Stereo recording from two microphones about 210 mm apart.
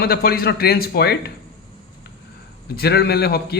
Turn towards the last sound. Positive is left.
turn(degrees=50)  # may be behind; listen again after turning